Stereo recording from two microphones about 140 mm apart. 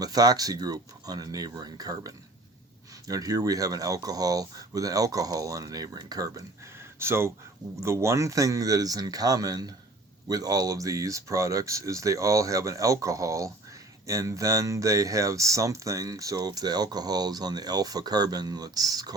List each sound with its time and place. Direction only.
0.0 s speech: 25° right (ahead or behind)